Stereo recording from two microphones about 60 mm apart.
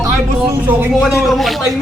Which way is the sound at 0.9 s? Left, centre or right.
Centre.